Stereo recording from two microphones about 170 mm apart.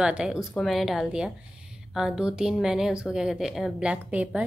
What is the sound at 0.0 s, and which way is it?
A woman's voice, 5° right (ahead or behind).